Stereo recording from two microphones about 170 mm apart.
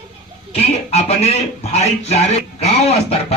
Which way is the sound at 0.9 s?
40° left (ahead or behind).